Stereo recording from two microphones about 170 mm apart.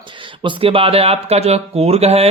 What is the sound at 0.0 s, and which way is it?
Speech, 30° right (ahead or behind).